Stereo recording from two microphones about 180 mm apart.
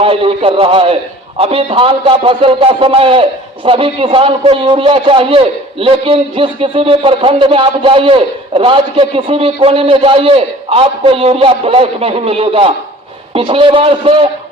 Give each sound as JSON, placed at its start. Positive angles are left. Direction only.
{"t": 0.0, "sound": "a man's voice", "side_deg": -30}